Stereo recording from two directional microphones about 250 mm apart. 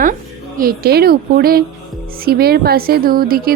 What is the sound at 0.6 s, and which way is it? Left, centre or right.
A woman's voice, right.